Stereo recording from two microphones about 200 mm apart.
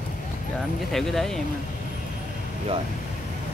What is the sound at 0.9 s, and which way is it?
Speech, centre (ahead or behind).